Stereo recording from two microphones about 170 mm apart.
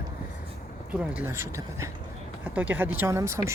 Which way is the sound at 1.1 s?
15° right (ahead or behind).